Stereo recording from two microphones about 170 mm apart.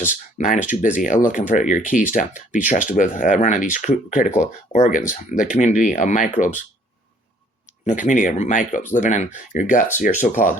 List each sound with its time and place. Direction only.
0.1 s speech: 50° left (ahead or behind)
7.9 s speech: 45° left (ahead or behind)